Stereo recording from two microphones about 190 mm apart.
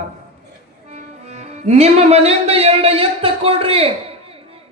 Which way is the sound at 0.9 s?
35° right (ahead or behind).